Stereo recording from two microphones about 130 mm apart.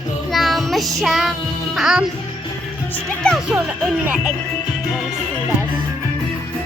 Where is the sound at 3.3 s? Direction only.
5° right (ahead or behind).